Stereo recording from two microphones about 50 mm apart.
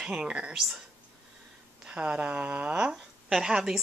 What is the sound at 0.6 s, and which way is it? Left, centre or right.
Speech, centre.